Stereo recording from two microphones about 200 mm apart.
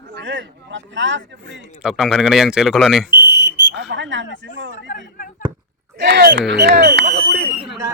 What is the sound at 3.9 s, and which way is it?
Speech, 65° right (ahead or behind).